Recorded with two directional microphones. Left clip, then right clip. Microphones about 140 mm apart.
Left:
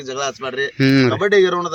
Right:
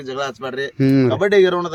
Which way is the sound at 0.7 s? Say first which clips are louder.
Left 1 dB; 5° right (ahead or behind).